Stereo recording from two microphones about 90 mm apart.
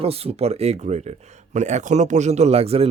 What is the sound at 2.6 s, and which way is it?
Speech, 90° right.